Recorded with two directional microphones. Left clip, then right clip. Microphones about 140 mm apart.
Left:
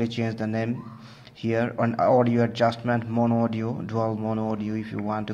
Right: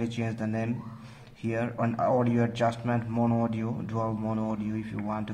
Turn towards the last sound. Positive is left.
turn(degrees=30)  # may be behind; listen again after turning